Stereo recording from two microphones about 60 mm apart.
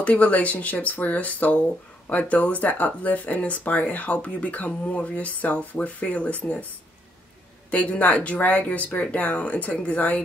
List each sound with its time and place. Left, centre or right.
0.0 s speech: left
7.7 s speech: left